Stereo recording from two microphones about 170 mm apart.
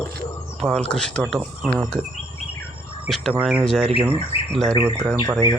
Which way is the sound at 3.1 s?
Centre (ahead or behind).